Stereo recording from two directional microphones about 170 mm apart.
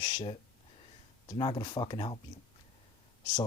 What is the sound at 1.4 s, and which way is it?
Speech, 30° left (ahead or behind).